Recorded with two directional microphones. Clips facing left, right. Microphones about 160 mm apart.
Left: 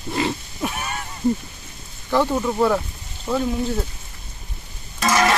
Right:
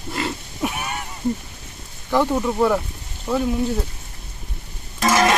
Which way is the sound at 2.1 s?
15° right (ahead or behind).